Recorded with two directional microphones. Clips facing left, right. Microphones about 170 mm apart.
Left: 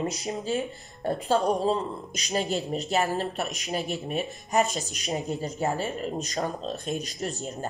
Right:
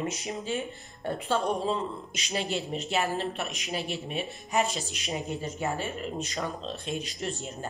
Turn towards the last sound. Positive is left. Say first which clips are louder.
# left 2 dB
turn(degrees=40)  # may be behind; listen again after turning